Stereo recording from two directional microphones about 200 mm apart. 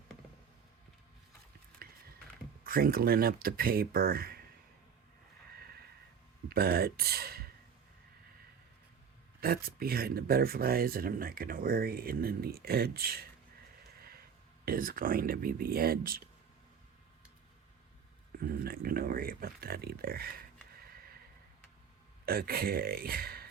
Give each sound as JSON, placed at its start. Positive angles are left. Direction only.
{"t": 2.6, "sound": "speech", "side_deg": -45}
{"t": 6.5, "sound": "speech", "side_deg": -50}
{"t": 9.4, "sound": "speech", "side_deg": -50}
{"t": 14.6, "sound": "speech", "side_deg": -45}
{"t": 18.3, "sound": "speech", "side_deg": -45}
{"t": 22.3, "sound": "speech", "side_deg": -50}